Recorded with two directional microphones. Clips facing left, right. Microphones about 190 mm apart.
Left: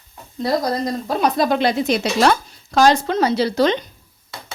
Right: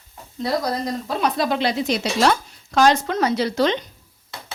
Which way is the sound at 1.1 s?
40° left (ahead or behind).